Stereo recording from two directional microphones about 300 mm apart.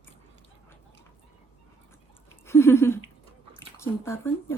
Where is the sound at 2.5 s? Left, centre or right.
Centre.